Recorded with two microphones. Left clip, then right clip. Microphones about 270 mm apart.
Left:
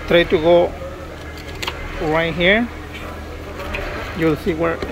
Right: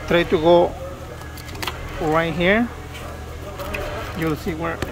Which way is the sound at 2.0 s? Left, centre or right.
Centre.